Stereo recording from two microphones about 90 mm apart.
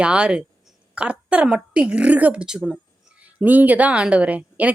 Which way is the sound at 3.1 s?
20° right (ahead or behind).